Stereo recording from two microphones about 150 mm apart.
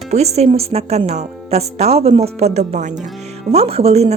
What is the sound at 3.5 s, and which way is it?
Speech, 40° right (ahead or behind).